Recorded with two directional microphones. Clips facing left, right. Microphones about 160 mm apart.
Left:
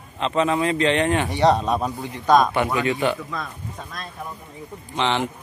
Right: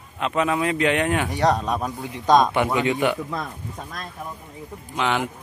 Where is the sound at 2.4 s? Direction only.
15° right (ahead or behind).